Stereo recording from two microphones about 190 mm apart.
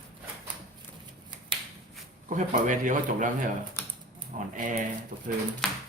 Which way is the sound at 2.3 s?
45° right (ahead or behind).